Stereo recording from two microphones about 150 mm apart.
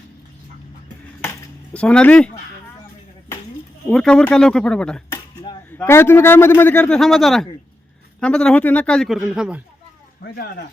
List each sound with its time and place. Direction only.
1.7 s a man's voice: 10° left (ahead or behind)
3.8 s a man's voice: 5° left (ahead or behind)
5.1 s a sound: 30° left (ahead or behind)
5.7 s a man's voice: 15° left (ahead or behind); by 9.6 s 5° right (ahead or behind)